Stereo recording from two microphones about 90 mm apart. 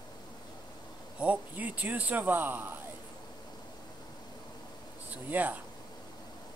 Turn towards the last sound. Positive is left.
turn(degrees=-20)  # may be behind; listen again after turning